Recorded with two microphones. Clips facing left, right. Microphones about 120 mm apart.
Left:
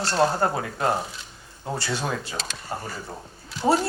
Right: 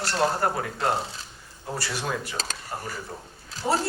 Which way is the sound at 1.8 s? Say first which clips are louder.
Left 1 dB; 25° left (ahead or behind).